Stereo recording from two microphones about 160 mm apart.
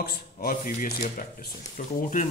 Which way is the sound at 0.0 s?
65° left (ahead or behind).